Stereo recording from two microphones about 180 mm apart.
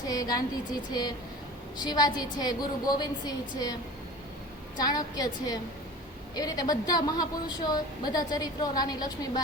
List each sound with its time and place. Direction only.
0.1 s a woman's voice: 20° left (ahead or behind)
1.8 s a woman's voice: 20° left (ahead or behind)
4.8 s a woman's voice: 20° left (ahead or behind)